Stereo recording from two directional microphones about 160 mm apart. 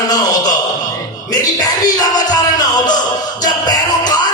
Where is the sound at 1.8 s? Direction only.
25° left (ahead or behind).